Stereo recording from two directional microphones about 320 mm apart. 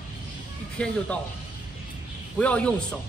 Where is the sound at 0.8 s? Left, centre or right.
Centre.